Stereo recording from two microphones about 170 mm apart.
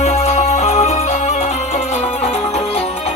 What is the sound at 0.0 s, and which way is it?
Music, 40° left (ahead or behind).